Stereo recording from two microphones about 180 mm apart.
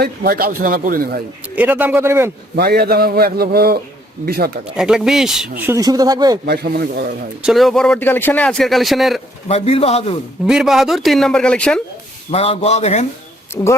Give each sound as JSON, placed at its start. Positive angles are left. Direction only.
{"t": 0.0, "sound": "speech", "side_deg": -55}
{"t": 1.5, "sound": "speech", "side_deg": -10}
{"t": 2.6, "sound": "a man's voice", "side_deg": -60}
{"t": 4.8, "sound": "speech", "side_deg": -5}
{"t": 6.4, "sound": "a man's voice", "side_deg": -65}
{"t": 7.4, "sound": "a man's voice", "side_deg": 0}
{"t": 9.5, "sound": "a man's voice", "side_deg": 35}
{"t": 10.4, "sound": "a man's voice", "side_deg": 0}
{"t": 12.3, "sound": "a man's voice", "side_deg": 35}
{"t": 13.6, "sound": "a woman's voice", "side_deg": 15}